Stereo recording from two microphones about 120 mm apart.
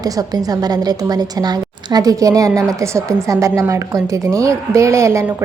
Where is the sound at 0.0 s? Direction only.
30° right (ahead or behind).